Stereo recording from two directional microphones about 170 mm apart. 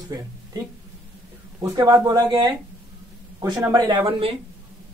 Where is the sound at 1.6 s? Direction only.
25° right (ahead or behind).